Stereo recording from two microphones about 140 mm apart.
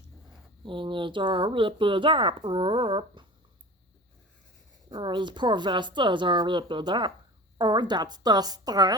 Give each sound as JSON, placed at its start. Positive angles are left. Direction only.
{"t": 0.6, "sound": "speech", "side_deg": -35}
{"t": 4.9, "sound": "a woman's voice", "side_deg": -35}